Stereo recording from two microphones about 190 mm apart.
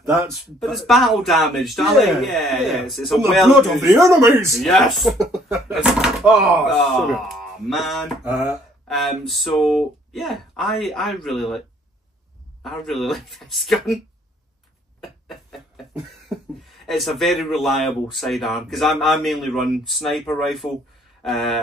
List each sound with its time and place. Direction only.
0.0 s speech: 15° right (ahead or behind)
0.6 s mantra: centre (ahead or behind)
4.1 s speech: 15° right (ahead or behind)
4.6 s mantra: centre (ahead or behind)
12.6 s mantra: centre (ahead or behind)
16.6 s mantra: centre (ahead or behind)
21.2 s a sound: centre (ahead or behind)